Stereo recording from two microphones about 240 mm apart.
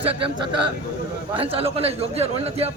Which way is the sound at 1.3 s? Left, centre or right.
Right.